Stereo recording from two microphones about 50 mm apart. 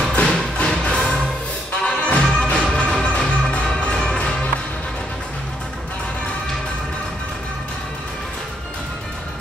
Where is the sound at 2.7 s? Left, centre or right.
Centre.